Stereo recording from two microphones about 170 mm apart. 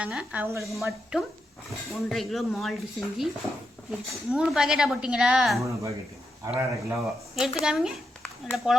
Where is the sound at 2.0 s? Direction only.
Centre (ahead or behind).